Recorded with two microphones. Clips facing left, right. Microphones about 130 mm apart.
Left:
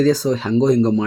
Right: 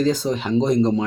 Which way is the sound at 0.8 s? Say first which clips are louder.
Left 2 dB; 5° right (ahead or behind).